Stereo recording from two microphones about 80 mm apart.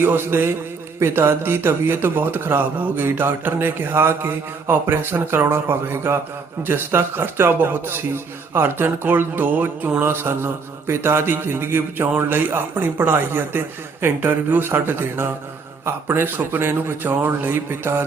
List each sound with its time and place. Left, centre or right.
0.0 s a man's voice: right